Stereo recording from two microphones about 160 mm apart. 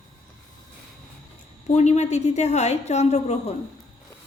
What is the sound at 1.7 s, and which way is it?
A woman's voice, 45° left (ahead or behind).